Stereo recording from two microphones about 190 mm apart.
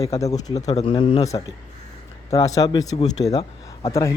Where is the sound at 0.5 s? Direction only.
35° left (ahead or behind).